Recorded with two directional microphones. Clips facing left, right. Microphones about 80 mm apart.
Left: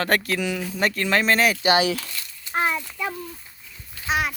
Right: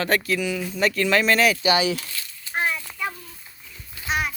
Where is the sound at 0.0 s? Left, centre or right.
Left.